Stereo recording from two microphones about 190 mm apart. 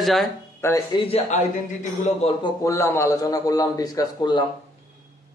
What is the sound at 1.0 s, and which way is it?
Speech, 35° left (ahead or behind).